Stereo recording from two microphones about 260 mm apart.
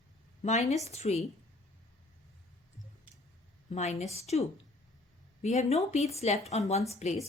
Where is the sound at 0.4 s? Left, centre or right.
Left.